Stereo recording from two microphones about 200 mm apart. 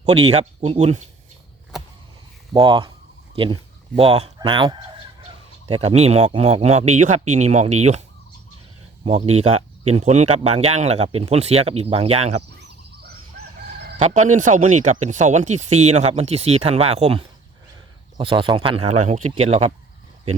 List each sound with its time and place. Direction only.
0.3 s speech: 30° right (ahead or behind)
2.5 s speech: 20° right (ahead or behind)
5.8 s speech: 30° right (ahead or behind)
9.0 s speech: 30° right (ahead or behind)
14.0 s speech: 40° right (ahead or behind)